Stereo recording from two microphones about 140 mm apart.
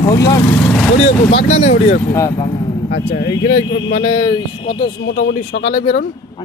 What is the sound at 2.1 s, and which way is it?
Speech, 25° left (ahead or behind).